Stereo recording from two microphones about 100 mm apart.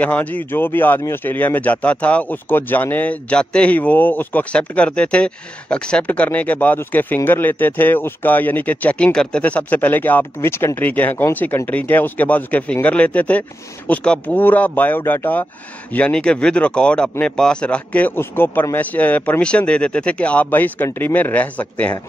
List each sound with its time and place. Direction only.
0.0 s speech: 15° left (ahead or behind)